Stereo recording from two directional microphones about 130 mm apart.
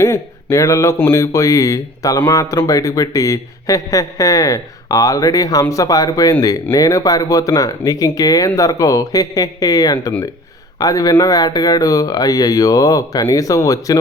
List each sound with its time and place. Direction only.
0.0 s speech: 20° left (ahead or behind)